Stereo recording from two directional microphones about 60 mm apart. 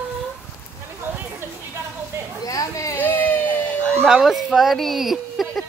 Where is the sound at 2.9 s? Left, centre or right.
Left.